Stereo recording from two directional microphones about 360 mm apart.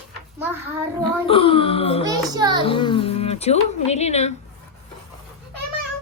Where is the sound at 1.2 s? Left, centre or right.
Centre.